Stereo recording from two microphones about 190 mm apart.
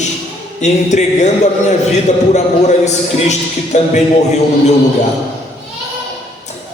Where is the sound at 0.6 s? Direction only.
40° left (ahead or behind).